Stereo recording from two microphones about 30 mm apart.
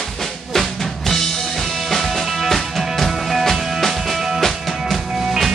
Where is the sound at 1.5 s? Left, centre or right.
Centre.